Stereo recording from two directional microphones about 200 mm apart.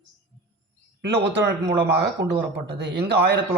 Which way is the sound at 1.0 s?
60° right (ahead or behind).